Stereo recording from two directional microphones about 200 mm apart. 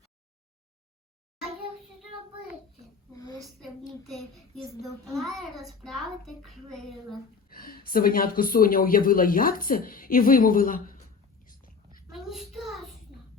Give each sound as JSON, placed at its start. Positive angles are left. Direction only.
{"t": 5.0, "sound": "a child's voice", "side_deg": 0}
{"t": 7.5, "sound": "speech", "side_deg": 45}
{"t": 12.1, "sound": "child singing", "side_deg": 0}